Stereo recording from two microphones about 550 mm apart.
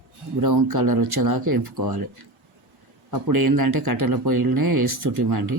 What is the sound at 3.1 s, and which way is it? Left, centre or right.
Speech, right.